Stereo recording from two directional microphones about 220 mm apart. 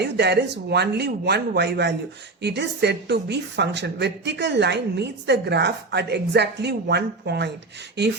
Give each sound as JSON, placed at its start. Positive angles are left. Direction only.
{"t": 0.0, "sound": "speech", "side_deg": -50}